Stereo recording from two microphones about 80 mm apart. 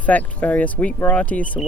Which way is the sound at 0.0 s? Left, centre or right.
Centre.